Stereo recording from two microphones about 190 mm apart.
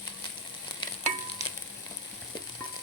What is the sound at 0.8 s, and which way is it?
Frying, 25° left (ahead or behind).